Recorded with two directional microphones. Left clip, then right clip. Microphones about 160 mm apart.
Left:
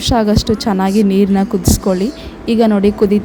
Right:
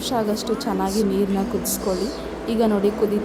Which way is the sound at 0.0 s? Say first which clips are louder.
Left 9 dB; 60° left (ahead or behind).